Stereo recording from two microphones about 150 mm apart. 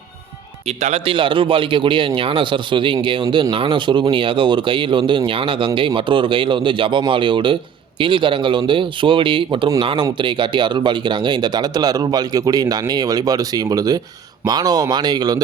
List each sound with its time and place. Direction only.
0.8 s speech: 45° right (ahead or behind)
3.2 s speech: 20° right (ahead or behind)
3.5 s speech: 35° right (ahead or behind)